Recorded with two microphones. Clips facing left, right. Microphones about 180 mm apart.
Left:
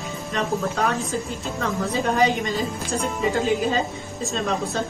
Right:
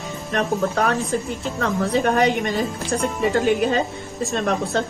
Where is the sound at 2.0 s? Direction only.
60° right (ahead or behind).